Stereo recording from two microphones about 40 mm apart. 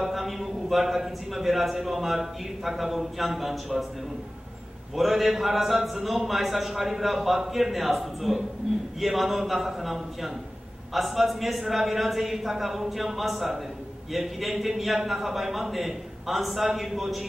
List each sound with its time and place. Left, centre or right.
0.0 s a man's voice: centre
4.9 s a man's voice: centre